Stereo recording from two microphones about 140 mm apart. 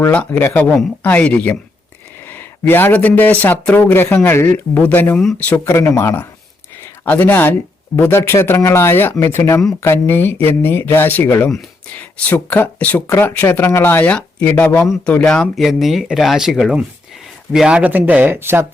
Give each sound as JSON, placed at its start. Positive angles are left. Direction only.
{"t": 0.0, "sound": "speech", "side_deg": 10}
{"t": 5.1, "sound": "speech", "side_deg": 0}